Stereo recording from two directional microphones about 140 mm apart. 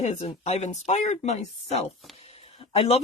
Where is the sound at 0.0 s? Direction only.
55° left (ahead or behind).